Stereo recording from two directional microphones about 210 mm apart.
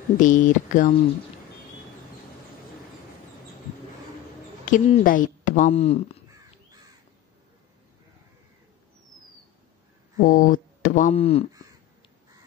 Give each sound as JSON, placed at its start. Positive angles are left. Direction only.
{"t": 0.2, "sound": "speech", "side_deg": 35}
{"t": 4.6, "sound": "speech", "side_deg": 40}
{"t": 10.1, "sound": "speech", "side_deg": 40}